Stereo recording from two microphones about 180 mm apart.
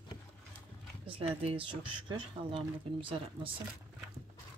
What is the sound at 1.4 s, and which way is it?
Speech, 30° right (ahead or behind).